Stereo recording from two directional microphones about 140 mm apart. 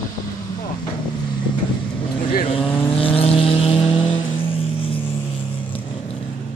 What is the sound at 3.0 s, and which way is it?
Vehicle, 40° left (ahead or behind).